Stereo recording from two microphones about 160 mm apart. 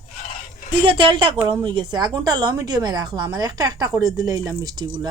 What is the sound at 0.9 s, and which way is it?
A woman's voice, 30° right (ahead or behind).